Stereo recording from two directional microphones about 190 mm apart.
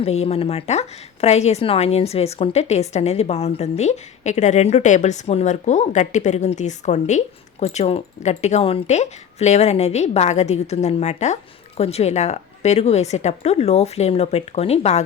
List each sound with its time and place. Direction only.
0.0 s a woman's voice: 35° left (ahead or behind)